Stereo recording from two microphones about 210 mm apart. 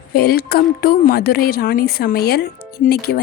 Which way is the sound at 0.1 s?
45° left (ahead or behind).